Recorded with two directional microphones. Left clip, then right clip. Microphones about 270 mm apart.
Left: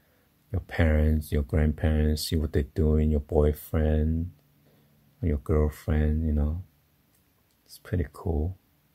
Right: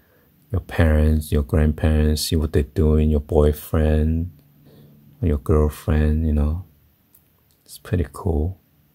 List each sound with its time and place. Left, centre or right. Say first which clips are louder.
0.5 s speech: right 6 dB; centre
5.2 s speech: right 7 dB; centre
7.6 s speech: right 7 dB; centre